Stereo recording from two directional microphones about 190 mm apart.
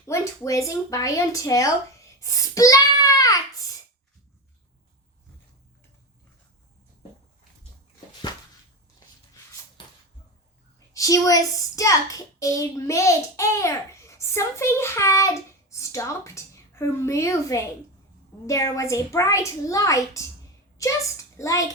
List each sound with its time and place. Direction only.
0.1 s a child's voice: 15° left (ahead or behind)
10.9 s a woman's voice: 20° left (ahead or behind)